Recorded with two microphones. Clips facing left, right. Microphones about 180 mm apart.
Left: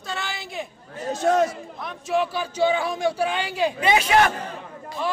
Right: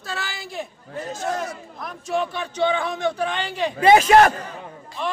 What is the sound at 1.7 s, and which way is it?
Speech, centre (ahead or behind).